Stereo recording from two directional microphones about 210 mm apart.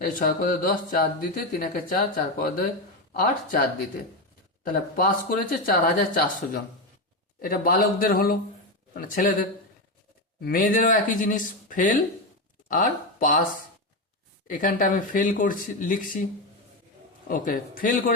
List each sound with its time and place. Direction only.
0.0 s speech: 40° left (ahead or behind)
14.4 s speech: 40° left (ahead or behind)
17.2 s speech: 40° left (ahead or behind)